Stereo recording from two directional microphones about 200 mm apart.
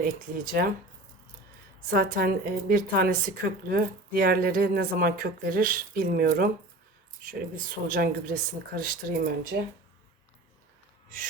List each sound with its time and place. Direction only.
0.0 s a woman's voice: 45° right (ahead or behind)
1.9 s a woman's voice: 45° right (ahead or behind)